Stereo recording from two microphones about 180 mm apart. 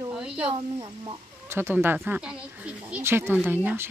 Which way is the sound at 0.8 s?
15° right (ahead or behind).